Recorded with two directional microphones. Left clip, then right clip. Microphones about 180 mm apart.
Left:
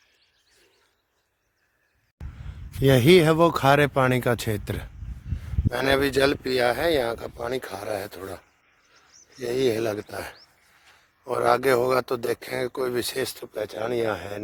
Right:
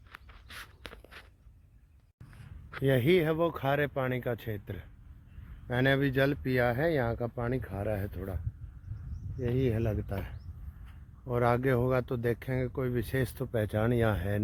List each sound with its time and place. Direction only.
2.8 s speech: 20° left (ahead or behind)
9.6 s speech: 45° left (ahead or behind)
11.3 s speech: 25° left (ahead or behind)
13.2 s speech: 15° left (ahead or behind)